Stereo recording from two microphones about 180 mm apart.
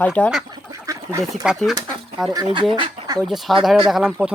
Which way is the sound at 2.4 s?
30° right (ahead or behind).